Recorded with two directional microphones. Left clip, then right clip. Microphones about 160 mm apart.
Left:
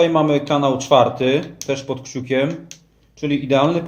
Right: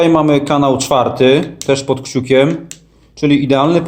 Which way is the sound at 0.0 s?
45° right (ahead or behind).